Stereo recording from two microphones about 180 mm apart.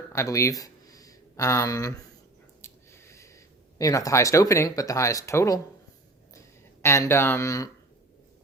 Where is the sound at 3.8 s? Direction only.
20° left (ahead or behind).